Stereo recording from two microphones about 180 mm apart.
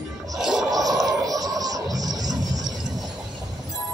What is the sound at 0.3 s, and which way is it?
Music, centre (ahead or behind).